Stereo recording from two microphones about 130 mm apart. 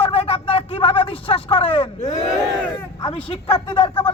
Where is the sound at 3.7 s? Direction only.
45° left (ahead or behind).